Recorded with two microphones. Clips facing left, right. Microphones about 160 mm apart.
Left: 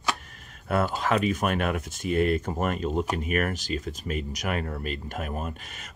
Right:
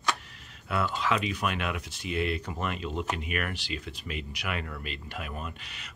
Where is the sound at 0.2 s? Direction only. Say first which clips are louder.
Left 2 dB; 50° left (ahead or behind).